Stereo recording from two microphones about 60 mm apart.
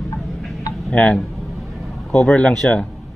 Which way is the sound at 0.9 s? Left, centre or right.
Left.